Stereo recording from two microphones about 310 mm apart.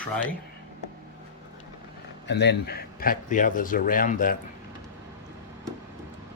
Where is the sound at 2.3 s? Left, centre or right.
Left.